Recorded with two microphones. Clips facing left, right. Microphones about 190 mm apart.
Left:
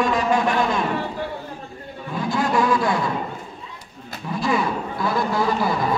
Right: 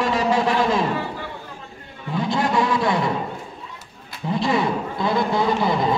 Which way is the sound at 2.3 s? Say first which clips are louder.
Left 1 dB; 25° right (ahead or behind).